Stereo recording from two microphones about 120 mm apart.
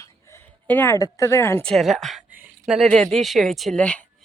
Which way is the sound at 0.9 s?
30° left (ahead or behind).